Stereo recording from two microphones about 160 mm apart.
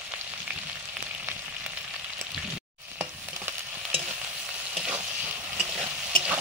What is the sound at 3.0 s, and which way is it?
Frying, 15° right (ahead or behind).